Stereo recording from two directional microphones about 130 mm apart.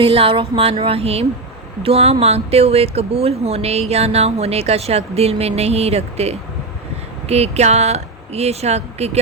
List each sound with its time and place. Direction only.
0.0 s speech: 45° right (ahead or behind)